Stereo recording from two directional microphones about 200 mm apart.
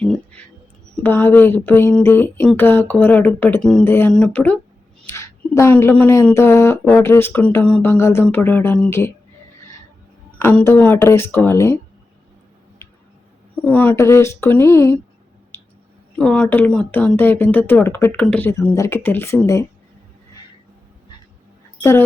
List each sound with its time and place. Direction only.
0.9 s speech: 10° left (ahead or behind)
10.3 s speech: 10° left (ahead or behind)
13.7 s speech: 10° left (ahead or behind)
15.5 s clicking: 10° left (ahead or behind)
16.1 s speech: 5° left (ahead or behind)
21.8 s speech: 10° left (ahead or behind)